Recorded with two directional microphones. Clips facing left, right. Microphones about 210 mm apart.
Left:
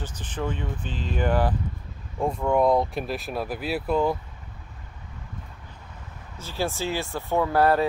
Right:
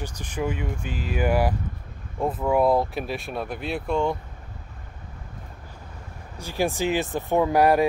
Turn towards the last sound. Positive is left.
turn(degrees=-15)  # may be behind; listen again after turning